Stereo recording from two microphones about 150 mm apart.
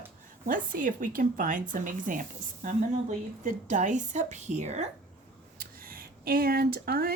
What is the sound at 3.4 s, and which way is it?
A woman's voice, 60° right (ahead or behind).